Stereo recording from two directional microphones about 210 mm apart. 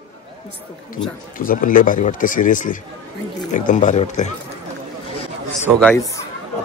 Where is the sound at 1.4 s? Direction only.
40° left (ahead or behind).